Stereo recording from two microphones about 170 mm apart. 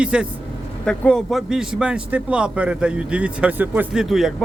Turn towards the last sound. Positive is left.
turn(degrees=-5)  # may be behind; listen again after turning